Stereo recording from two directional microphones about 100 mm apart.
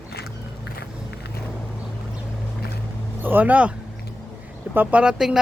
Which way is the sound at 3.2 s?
15° right (ahead or behind).